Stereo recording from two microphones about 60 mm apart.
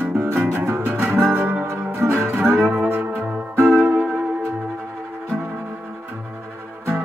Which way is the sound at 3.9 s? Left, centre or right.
Right.